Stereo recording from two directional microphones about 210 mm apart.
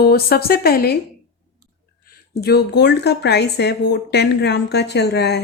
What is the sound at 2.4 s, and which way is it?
A woman's voice, 50° left (ahead or behind).